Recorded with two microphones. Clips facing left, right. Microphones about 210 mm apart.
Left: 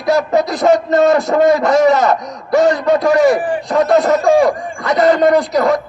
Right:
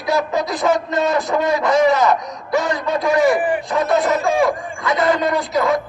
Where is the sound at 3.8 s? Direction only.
40° left (ahead or behind).